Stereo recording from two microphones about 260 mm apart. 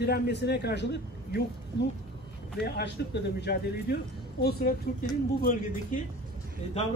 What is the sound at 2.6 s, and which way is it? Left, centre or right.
A man's voice, left.